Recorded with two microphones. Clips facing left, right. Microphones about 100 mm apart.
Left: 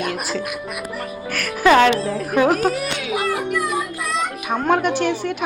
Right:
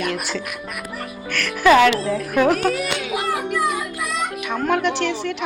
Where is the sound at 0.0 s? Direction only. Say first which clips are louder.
Left 1 dB; 35° left (ahead or behind).